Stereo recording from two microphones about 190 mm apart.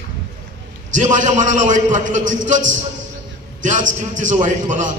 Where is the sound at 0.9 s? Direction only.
40° right (ahead or behind).